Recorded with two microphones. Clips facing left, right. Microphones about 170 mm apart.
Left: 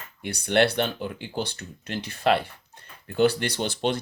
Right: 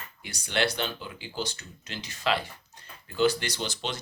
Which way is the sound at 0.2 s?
60° left (ahead or behind).